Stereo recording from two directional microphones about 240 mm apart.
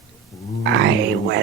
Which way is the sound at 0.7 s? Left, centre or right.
Right.